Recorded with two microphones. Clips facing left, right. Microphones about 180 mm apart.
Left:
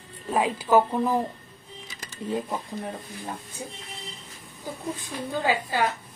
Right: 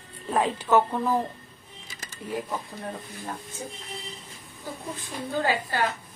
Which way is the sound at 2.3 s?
25° left (ahead or behind).